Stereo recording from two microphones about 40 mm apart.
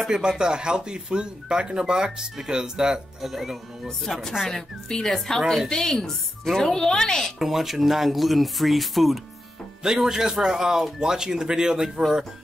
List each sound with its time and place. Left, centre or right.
0.1 s speech: centre
3.2 s speech: centre
4.1 s a woman's voice: centre
7.3 s speech: centre
9.8 s speech: centre